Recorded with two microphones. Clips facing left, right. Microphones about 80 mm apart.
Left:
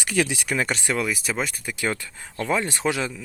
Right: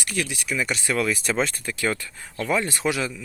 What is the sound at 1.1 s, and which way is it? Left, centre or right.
Speech, centre.